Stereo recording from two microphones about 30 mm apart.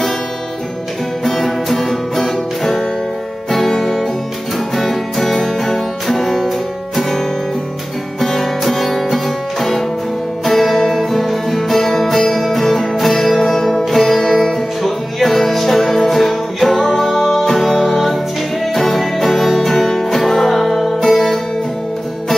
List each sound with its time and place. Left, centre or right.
1.2 s music: centre
8.2 s music: centre
16.7 s music: centre
17.1 s music: centre
20.4 s music: centre